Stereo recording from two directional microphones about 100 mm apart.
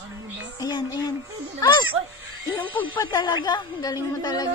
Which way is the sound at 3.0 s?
45° left (ahead or behind).